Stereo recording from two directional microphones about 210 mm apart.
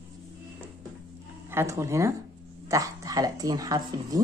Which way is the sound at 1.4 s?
10° right (ahead or behind).